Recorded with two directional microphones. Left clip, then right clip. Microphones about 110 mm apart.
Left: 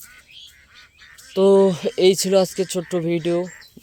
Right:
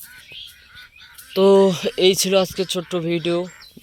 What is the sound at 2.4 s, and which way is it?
Speech, 35° left (ahead or behind).